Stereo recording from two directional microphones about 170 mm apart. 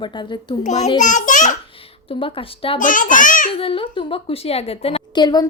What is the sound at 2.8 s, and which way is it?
Speech, 50° left (ahead or behind).